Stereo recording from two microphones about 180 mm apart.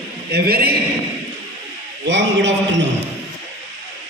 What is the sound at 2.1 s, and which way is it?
Speech, 85° right.